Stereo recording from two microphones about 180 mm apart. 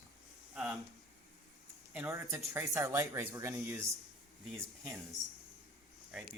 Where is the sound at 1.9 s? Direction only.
10° right (ahead or behind).